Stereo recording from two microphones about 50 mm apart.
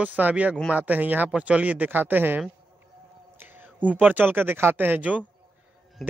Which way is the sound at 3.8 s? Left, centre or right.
Right.